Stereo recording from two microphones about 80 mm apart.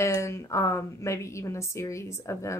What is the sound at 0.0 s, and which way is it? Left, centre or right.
A woman's voice, left.